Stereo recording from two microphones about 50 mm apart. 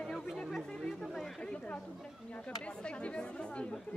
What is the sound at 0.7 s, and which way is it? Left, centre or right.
Speech, centre.